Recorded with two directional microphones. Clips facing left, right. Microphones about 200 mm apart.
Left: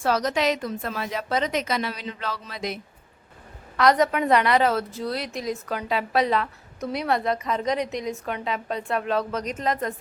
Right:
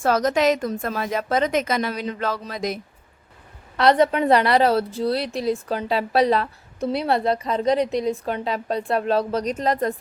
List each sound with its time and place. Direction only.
0.0 s a woman's voice: 50° right (ahead or behind)
3.8 s a woman's voice: 30° right (ahead or behind)